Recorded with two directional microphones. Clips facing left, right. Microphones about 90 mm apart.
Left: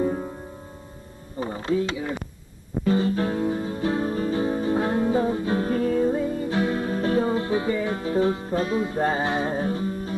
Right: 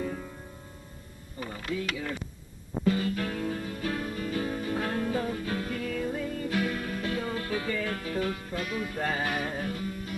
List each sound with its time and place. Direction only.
0.0 s music: 30° left (ahead or behind)
1.4 s mechanisms: 30° left (ahead or behind)
2.9 s music: 30° left (ahead or behind)